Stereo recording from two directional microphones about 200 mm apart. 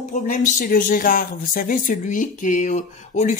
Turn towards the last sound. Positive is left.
turn(degrees=40)  # may be behind; listen again after turning